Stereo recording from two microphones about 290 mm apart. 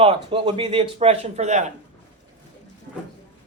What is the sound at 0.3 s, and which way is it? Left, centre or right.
A man's voice, centre.